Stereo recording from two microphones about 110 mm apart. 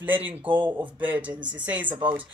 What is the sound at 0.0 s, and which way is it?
Speech, 15° right (ahead or behind).